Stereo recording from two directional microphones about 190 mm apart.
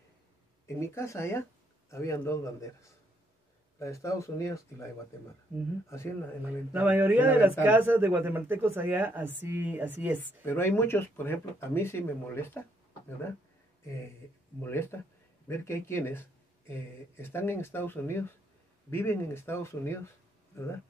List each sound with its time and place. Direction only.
0.7 s speech: 15° left (ahead or behind)
5.9 s speech: 15° left (ahead or behind)
6.7 s a man's voice: 10° right (ahead or behind)
10.4 s speech: 10° left (ahead or behind)
13.8 s speech: 15° left (ahead or behind)